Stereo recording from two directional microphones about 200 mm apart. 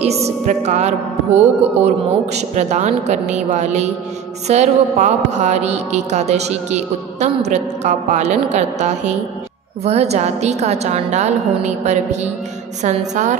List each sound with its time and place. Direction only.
0.0 s a woman's voice: 30° right (ahead or behind)